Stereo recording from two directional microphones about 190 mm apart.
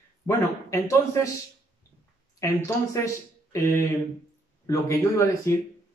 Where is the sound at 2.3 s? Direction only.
15° left (ahead or behind).